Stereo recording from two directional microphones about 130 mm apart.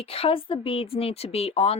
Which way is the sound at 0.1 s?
45° left (ahead or behind).